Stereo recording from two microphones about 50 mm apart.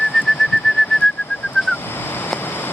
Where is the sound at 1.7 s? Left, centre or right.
Left.